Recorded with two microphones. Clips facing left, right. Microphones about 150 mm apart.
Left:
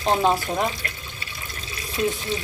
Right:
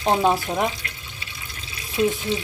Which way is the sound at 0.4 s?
5° right (ahead or behind).